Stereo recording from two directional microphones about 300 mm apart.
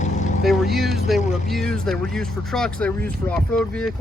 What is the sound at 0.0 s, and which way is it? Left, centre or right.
Boat, left.